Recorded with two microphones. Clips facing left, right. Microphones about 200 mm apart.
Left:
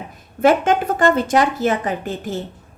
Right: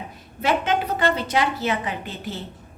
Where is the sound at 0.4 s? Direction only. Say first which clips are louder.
Left 7 dB; 50° left (ahead or behind).